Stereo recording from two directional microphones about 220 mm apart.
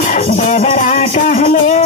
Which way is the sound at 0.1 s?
35° left (ahead or behind).